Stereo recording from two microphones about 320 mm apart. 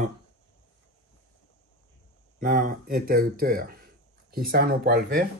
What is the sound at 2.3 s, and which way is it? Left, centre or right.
Speech, right.